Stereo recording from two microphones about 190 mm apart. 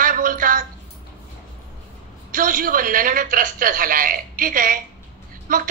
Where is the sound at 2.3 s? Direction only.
45° right (ahead or behind).